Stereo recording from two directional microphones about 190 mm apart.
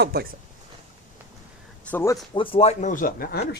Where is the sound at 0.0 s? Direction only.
55° right (ahead or behind).